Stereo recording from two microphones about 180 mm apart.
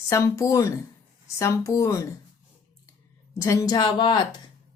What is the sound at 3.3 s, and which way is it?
Speech, 15° left (ahead or behind).